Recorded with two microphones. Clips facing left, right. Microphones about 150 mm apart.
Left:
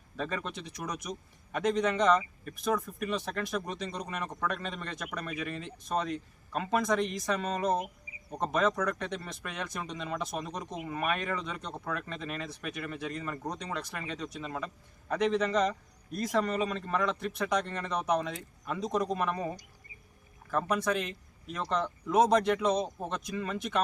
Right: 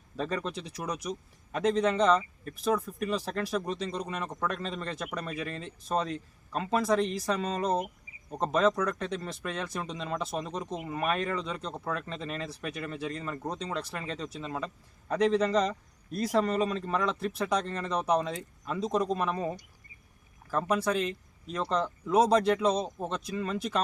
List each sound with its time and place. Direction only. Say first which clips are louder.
0.2 s speech: right 3 dB; 35° right (ahead or behind)
20.5 s speech: right 1 dB; 30° right (ahead or behind)